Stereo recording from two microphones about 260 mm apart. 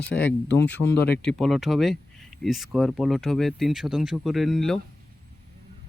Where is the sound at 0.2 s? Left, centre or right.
Left.